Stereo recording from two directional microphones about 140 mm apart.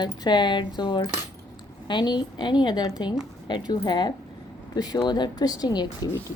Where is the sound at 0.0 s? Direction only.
35° left (ahead or behind).